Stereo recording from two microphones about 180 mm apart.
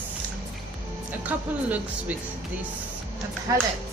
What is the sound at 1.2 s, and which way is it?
Speech, 10° right (ahead or behind).